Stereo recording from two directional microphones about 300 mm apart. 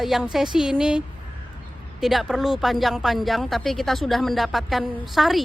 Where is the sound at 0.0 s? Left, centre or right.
Centre.